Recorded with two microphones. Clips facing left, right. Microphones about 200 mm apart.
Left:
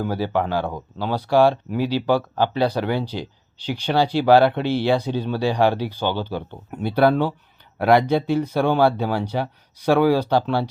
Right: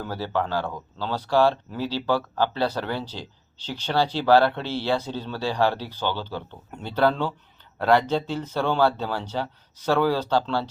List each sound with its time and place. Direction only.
0.0 s speech: 15° left (ahead or behind)